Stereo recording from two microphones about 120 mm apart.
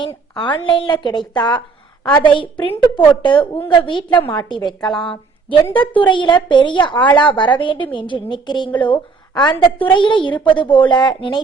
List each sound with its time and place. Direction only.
0.3 s a woman's voice: 40° left (ahead or behind)